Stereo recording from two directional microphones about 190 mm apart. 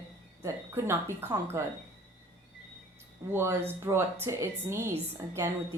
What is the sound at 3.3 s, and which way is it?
A woman's voice, 15° right (ahead or behind).